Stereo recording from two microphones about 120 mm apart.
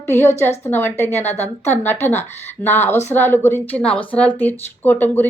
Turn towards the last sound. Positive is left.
turn(degrees=15)  # may be behind; listen again after turning